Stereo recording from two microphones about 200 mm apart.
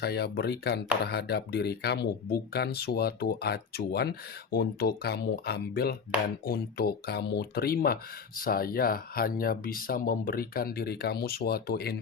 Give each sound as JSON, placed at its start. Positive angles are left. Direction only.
{"t": 0.0, "sound": "speech", "side_deg": 55}